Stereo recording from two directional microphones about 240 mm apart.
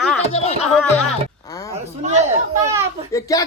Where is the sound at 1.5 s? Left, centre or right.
Centre.